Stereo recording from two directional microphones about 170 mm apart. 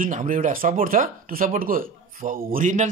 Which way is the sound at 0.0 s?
50° right (ahead or behind).